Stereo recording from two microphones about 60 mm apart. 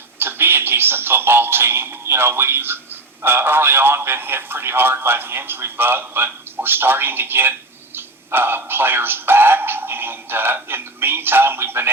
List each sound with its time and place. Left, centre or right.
0.2 s speech: right